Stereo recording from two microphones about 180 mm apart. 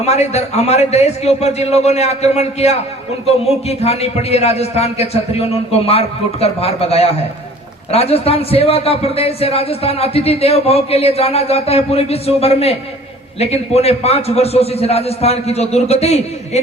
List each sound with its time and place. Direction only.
0.0 s a man's voice: 35° left (ahead or behind)